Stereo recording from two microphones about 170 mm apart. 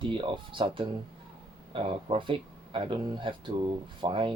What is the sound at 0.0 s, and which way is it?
Speech, 30° right (ahead or behind).